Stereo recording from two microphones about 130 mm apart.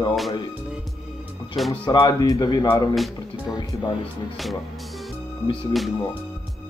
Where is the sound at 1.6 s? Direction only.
Centre (ahead or behind).